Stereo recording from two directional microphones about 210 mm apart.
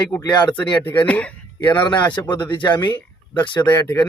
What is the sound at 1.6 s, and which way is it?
Speech, 20° left (ahead or behind).